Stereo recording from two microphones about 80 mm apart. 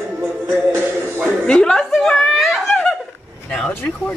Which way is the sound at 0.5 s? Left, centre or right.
Right.